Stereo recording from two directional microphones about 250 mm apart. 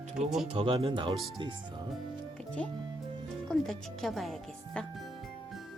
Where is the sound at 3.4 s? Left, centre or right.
Centre.